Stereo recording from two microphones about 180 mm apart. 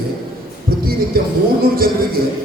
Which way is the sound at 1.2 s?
55° right (ahead or behind).